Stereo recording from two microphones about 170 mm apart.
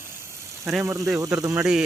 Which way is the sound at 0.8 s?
15° right (ahead or behind).